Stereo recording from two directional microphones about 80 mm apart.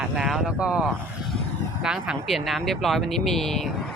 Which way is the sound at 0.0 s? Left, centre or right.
Centre.